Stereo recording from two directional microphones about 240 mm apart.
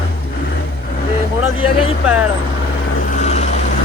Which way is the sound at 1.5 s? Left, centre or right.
Left.